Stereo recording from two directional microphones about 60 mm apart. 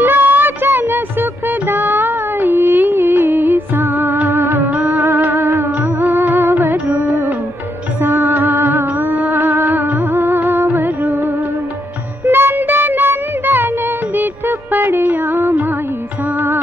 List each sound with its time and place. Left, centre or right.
0.0 s child singing: right
1.7 s music: right
8.7 s music: right
9.1 s music: right
12.3 s music: right
14.1 s music of bollywood: right